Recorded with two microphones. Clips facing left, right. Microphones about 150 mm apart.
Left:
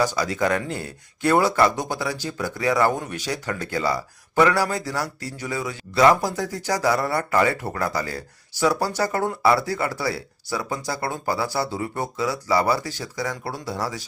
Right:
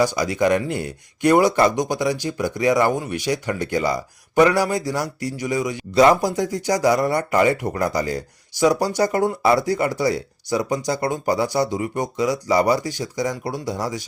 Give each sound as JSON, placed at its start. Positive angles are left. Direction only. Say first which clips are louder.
{"t": 0.0, "sound": "speech", "louder": "right 3 dB", "side_deg": -15}